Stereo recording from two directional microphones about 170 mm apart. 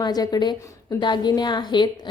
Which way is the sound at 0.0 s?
25° left (ahead or behind).